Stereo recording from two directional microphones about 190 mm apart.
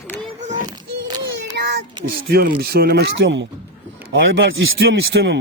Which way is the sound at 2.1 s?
55° right (ahead or behind).